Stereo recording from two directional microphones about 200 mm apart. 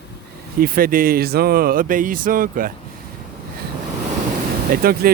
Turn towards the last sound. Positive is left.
turn(degrees=-45)  # may be behind; listen again after turning